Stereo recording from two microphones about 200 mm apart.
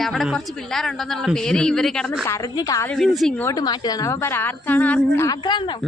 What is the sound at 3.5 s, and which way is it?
A woman's voice, 20° left (ahead or behind).